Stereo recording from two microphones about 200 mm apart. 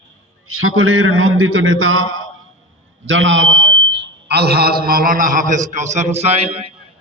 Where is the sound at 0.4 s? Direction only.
90° right.